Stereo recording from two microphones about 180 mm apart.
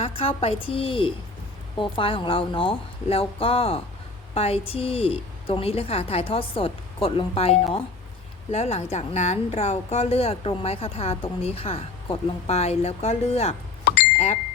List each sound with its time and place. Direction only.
0.0 s a woman's voice: 30° left (ahead or behind)